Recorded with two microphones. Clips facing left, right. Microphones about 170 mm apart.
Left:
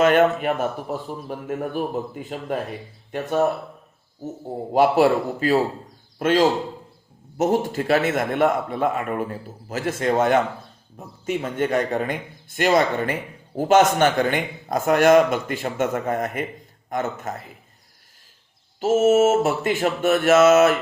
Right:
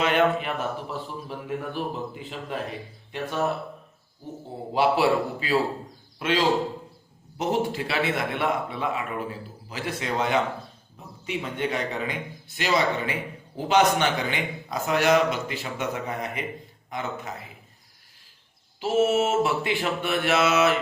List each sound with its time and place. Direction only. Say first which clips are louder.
0.0 s speech: left 6 dB; 45° left (ahead or behind)
18.8 s speech: left 6 dB; 45° left (ahead or behind)